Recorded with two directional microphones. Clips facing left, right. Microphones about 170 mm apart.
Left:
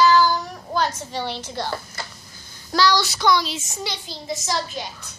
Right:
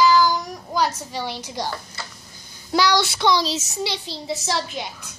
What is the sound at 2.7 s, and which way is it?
Speech, 20° right (ahead or behind).